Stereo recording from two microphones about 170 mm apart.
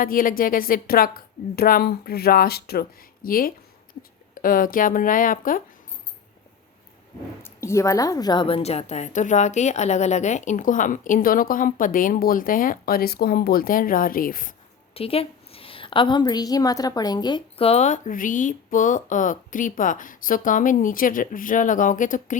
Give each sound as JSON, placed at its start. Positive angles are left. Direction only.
{"t": 0.0, "sound": "a woman's voice", "side_deg": 55}
{"t": 7.4, "sound": "a woman's voice", "side_deg": 15}
{"t": 14.9, "sound": "a woman's voice", "side_deg": 35}